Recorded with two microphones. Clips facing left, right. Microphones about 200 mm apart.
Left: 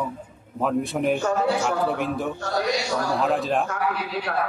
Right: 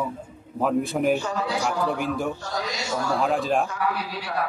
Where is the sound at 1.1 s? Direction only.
55° left (ahead or behind).